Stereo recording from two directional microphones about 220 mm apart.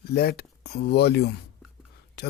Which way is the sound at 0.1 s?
45° left (ahead or behind).